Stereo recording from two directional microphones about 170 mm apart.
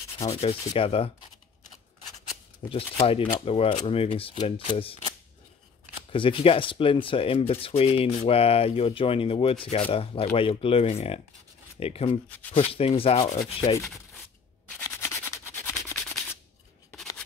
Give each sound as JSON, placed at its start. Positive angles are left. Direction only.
{"t": 0.2, "sound": "speech", "side_deg": 35}
{"t": 2.7, "sound": "speech", "side_deg": 35}
{"t": 6.1, "sound": "speech", "side_deg": 30}
{"t": 15.0, "sound": "rub", "side_deg": 15}